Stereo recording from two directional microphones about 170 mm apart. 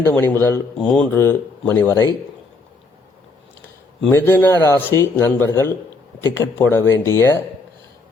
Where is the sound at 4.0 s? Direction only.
10° left (ahead or behind).